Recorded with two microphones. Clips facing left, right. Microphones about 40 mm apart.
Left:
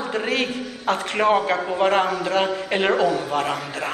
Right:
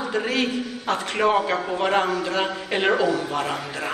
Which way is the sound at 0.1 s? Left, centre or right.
Centre.